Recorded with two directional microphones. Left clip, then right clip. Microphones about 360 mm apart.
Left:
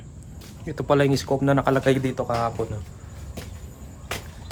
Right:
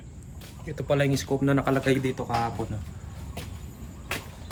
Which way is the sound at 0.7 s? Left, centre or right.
Centre.